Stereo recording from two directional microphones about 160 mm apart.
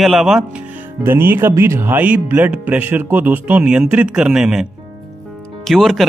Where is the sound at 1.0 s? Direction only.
15° right (ahead or behind).